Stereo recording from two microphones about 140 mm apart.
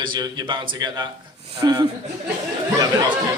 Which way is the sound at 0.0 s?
30° right (ahead or behind).